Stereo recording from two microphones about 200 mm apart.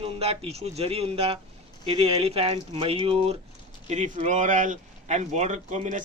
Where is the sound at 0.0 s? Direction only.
30° right (ahead or behind).